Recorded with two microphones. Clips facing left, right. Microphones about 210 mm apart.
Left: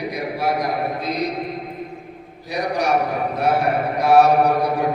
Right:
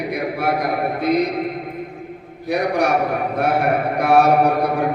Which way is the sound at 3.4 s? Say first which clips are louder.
Right 1 dB; 55° right (ahead or behind).